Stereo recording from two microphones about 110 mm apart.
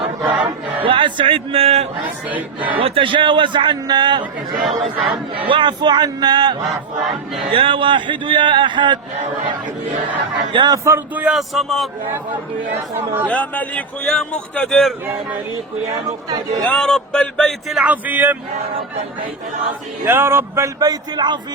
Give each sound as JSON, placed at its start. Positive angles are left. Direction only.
{"t": 0.3, "sound": "choir", "side_deg": -50}
{"t": 2.0, "sound": "speech", "side_deg": -15}
{"t": 2.7, "sound": "a man's voice", "side_deg": -55}
{"t": 4.5, "sound": "a man's voice", "side_deg": 0}
{"t": 5.5, "sound": "a man's voice", "side_deg": -50}
{"t": 7.5, "sound": "a man's voice", "side_deg": -55}
{"t": 10.5, "sound": "a man's voice", "side_deg": -45}
{"t": 10.8, "sound": "speech", "side_deg": -25}
{"t": 11.2, "sound": "a man's voice", "side_deg": -5}
{"t": 13.3, "sound": "a man's voice", "side_deg": 15}
{"t": 16.6, "sound": "a man's voice", "side_deg": 5}
{"t": 17.8, "sound": "speech", "side_deg": -15}
{"t": 20.1, "sound": "speech", "side_deg": -20}
{"t": 20.7, "sound": "a man's voice", "side_deg": -35}